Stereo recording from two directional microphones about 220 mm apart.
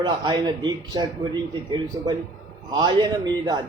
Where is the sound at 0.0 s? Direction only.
20° right (ahead or behind).